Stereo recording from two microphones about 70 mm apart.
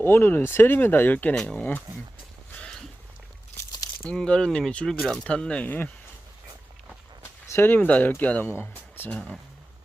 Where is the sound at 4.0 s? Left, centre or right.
Centre.